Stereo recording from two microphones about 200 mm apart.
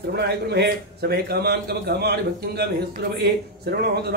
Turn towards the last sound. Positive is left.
turn(degrees=-55)  # may be behind; listen again after turning